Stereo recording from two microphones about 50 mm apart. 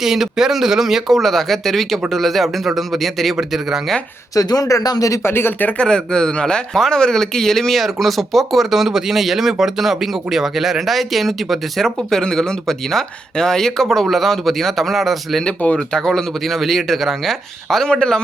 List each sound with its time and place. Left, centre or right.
0.0 s speech: centre
4.7 s a man's voice: left
5.2 s speech: left
5.7 s speech: centre
12.1 s speech: centre
15.6 s speech: left
16.0 s speech: centre